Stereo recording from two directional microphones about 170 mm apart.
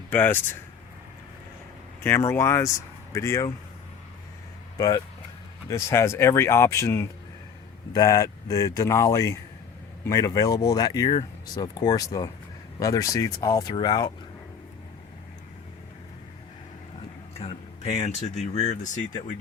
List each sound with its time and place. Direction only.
0.1 s speech: 10° left (ahead or behind)
2.0 s speech: 15° left (ahead or behind)
5.6 s speech: 15° left (ahead or behind)
17.3 s speech: 35° left (ahead or behind)